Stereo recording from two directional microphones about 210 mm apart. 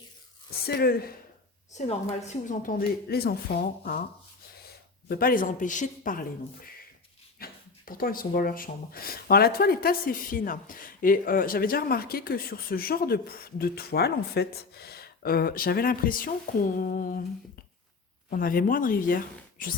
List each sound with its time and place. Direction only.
0.6 s speech: 50° left (ahead or behind)
5.0 s speech: 45° left (ahead or behind)
7.3 s speech: 45° left (ahead or behind)
18.3 s speech: 45° left (ahead or behind)